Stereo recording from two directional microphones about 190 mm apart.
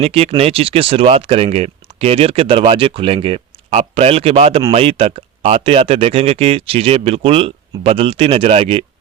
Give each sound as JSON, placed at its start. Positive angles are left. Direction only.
{"t": 0.0, "sound": "speech", "side_deg": -30}